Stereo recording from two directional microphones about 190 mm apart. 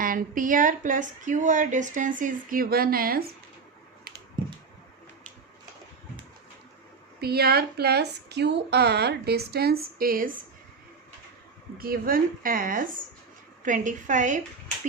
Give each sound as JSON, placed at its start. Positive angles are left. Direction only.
{"t": 0.0, "sound": "speech", "side_deg": -45}
{"t": 7.2, "sound": "a woman's voice", "side_deg": -55}
{"t": 11.8, "sound": "speech", "side_deg": -50}